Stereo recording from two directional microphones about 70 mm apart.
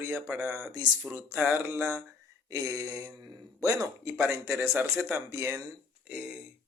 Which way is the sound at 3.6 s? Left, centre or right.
Right.